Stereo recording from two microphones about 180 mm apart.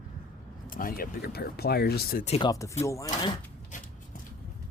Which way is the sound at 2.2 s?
35° left (ahead or behind).